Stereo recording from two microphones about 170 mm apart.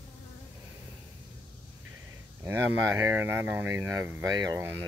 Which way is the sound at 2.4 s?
15° right (ahead or behind).